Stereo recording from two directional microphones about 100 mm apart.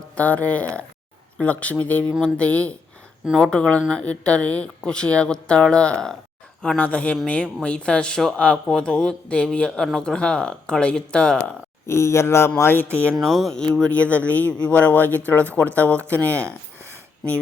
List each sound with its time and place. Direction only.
0.2 s speech: 15° left (ahead or behind)
11.9 s speech: 25° left (ahead or behind)
13.1 s speech: centre (ahead or behind)